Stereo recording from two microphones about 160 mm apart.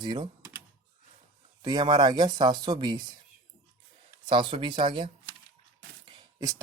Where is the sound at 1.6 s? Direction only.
25° right (ahead or behind).